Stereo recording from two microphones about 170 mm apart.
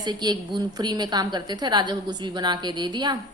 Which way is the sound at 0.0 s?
25° right (ahead or behind).